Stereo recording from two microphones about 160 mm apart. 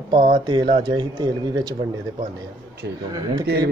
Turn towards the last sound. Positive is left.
turn(degrees=-25)  # may be behind; listen again after turning